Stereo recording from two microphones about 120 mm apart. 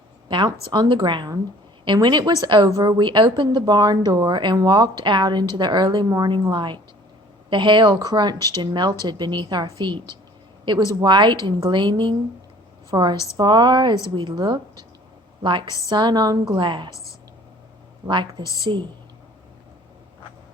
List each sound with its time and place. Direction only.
0.3 s a woman's voice: 40° right (ahead or behind)
2.6 s a woman's voice: 30° right (ahead or behind)
3.0 s speech: 40° right (ahead or behind)
8.4 s speech: 25° left (ahead or behind)
8.6 s a woman's voice: 35° right (ahead or behind)
15.6 s speech: 25° left (ahead or behind)
15.9 s speech: 35° right (ahead or behind)
18.1 s speech: 40° right (ahead or behind)
18.4 s speech: 25° left (ahead or behind)